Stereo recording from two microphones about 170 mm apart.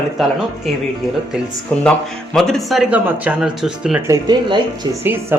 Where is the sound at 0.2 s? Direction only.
Centre (ahead or behind).